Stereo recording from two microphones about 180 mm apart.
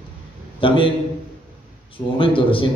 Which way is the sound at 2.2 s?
30° left (ahead or behind).